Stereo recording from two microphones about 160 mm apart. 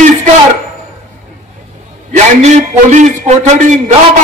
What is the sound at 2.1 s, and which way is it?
A man's voice, 45° right (ahead or behind).